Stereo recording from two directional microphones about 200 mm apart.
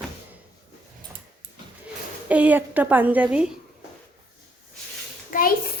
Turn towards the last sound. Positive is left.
turn(degrees=45)  # may be behind; listen again after turning